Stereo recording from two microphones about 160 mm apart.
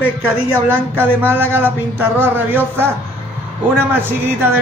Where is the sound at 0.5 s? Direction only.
15° right (ahead or behind).